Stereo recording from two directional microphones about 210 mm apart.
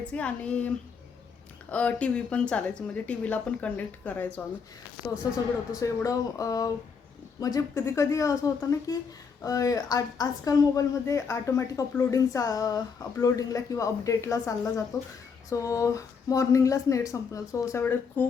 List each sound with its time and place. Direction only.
0.1 s speech: 5° left (ahead or behind)
1.7 s a woman's voice: 5° left (ahead or behind)
5.7 s a woman's voice: 15° left (ahead or behind)
9.4 s a woman's voice: 15° left (ahead or behind)